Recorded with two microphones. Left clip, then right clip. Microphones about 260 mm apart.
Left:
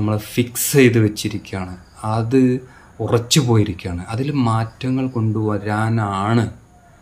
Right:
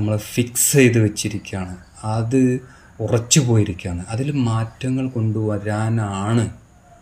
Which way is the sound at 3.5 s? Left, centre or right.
Centre.